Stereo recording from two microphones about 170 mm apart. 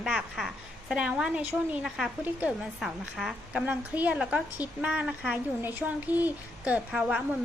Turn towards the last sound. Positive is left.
turn(degrees=-5)  # may be behind; listen again after turning